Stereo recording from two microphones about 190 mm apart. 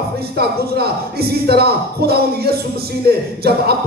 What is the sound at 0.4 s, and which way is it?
Speech, 55° right (ahead or behind).